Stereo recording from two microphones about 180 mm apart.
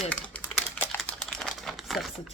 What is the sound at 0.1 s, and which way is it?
Typing, 10° left (ahead or behind).